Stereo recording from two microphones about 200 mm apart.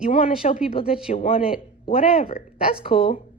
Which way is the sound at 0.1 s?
30° left (ahead or behind).